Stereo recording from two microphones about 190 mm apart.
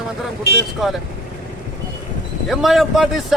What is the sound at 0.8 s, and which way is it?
Speech, centre (ahead or behind).